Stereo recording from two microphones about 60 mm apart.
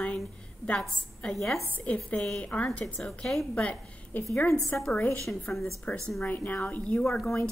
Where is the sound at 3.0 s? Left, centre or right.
Centre.